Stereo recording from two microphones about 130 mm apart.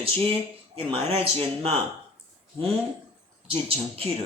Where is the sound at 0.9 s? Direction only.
45° right (ahead or behind).